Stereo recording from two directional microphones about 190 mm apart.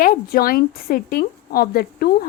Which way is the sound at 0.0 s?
50° left (ahead or behind).